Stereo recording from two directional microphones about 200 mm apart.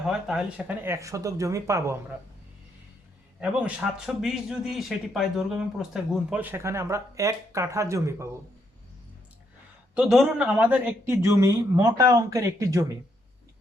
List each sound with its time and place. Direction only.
0.0 s speech: centre (ahead or behind)
0.9 s speech: 15° right (ahead or behind)
3.4 s speech: 5° right (ahead or behind)
9.9 s speech: 5° right (ahead or behind)